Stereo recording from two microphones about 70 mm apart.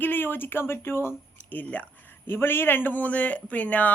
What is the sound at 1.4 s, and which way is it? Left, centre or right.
Speech, left.